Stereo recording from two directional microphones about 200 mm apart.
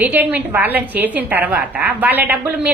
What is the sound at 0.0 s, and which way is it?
A woman's voice, 10° right (ahead or behind).